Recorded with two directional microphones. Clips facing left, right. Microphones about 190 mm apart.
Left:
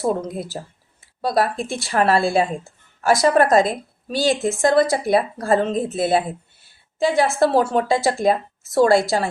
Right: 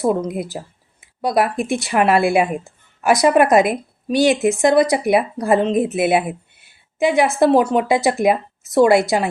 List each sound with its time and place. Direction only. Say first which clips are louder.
0.0 s a woman's voice: right 3 dB; 15° right (ahead or behind)